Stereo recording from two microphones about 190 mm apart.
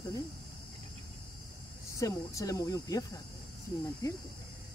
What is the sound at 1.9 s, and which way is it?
Speech, 15° left (ahead or behind).